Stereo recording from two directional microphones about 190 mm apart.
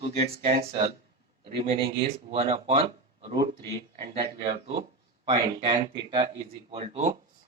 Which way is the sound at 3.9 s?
30° right (ahead or behind).